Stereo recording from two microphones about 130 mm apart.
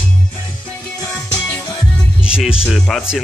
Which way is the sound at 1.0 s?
5° left (ahead or behind).